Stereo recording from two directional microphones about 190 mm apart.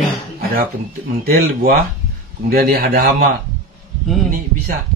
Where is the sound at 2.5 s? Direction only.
50° right (ahead or behind).